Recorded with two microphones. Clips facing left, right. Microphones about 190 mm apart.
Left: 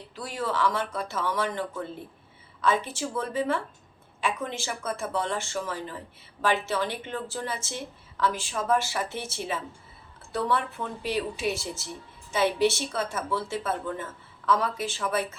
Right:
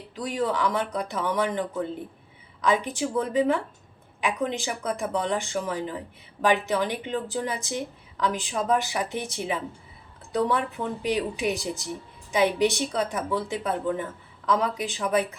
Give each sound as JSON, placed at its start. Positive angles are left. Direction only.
{"t": 0.2, "sound": "a woman's voice", "side_deg": -20}